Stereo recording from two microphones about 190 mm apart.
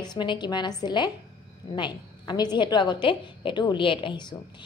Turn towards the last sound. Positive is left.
turn(degrees=25)  # may be behind; listen again after turning